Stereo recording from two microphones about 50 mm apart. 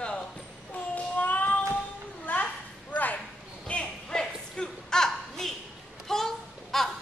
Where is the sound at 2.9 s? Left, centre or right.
Left.